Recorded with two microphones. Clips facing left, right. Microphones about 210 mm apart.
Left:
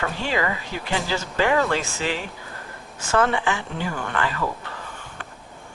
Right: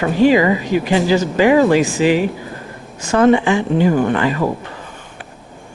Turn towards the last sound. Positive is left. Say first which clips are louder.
# right 11 dB
turn(degrees=-20)  # may be behind; listen again after turning